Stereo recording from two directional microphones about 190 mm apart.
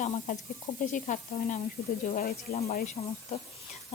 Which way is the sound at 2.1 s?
50° left (ahead or behind).